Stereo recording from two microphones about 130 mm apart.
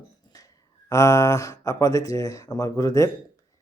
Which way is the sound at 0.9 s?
25° left (ahead or behind).